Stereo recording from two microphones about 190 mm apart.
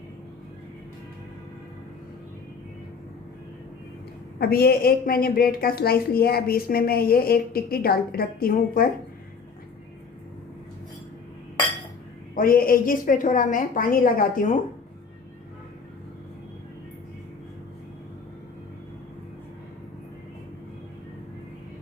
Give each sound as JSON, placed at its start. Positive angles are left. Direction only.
{"t": 4.4, "sound": "a woman's voice", "side_deg": 55}
{"t": 12.3, "sound": "a woman's voice", "side_deg": 50}